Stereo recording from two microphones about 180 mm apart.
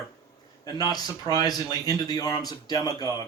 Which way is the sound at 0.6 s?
20° left (ahead or behind).